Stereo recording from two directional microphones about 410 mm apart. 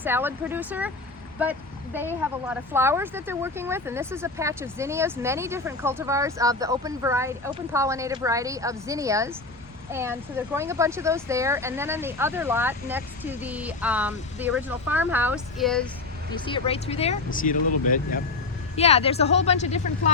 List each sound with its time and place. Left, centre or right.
0.0 s speech: centre
16.3 s speech: centre